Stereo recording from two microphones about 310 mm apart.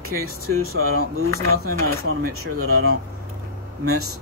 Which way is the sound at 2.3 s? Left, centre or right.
Right.